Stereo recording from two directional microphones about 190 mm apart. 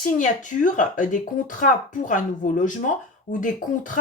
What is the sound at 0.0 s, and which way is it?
Speech, 40° left (ahead or behind).